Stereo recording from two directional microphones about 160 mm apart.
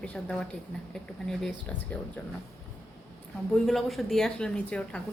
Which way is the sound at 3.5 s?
Centre (ahead or behind).